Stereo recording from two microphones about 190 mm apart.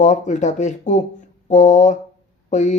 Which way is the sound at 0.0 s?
40° left (ahead or behind).